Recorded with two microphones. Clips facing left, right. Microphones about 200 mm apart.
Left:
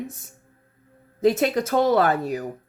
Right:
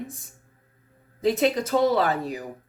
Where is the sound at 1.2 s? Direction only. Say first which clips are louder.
Left 2 dB; 45° left (ahead or behind).